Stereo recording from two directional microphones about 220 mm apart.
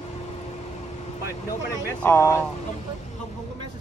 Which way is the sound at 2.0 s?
10° left (ahead or behind).